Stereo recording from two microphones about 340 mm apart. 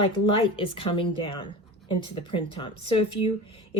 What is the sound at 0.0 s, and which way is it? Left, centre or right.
Speech, centre.